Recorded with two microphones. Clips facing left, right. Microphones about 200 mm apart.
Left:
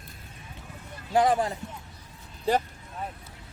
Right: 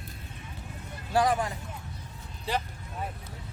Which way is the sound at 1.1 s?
25° left (ahead or behind).